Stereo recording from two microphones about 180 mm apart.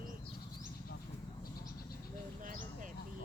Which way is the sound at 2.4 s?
45° right (ahead or behind).